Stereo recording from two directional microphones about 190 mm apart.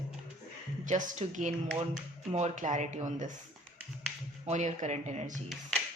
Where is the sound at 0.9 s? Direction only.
40° right (ahead or behind).